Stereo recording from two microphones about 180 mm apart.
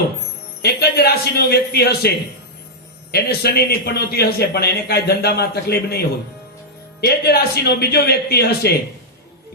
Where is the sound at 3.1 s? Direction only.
60° left (ahead or behind).